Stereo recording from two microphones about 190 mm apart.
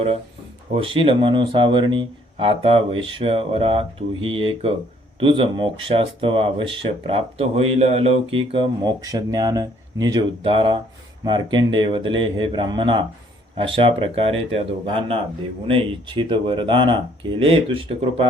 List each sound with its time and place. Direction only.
0.7 s speech: 25° right (ahead or behind)